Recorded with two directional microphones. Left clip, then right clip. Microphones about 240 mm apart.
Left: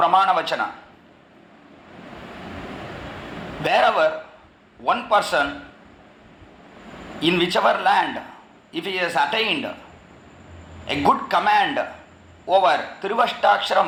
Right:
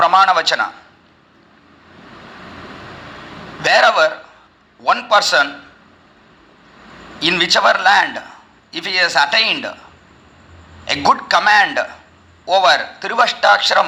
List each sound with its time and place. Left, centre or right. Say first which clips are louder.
0.0 s a man's voice: right 6 dB; right
3.6 s a man's voice: right 6 dB; right
7.2 s a man's voice: right 6 dB; right
10.8 s a man's voice: right 5 dB; right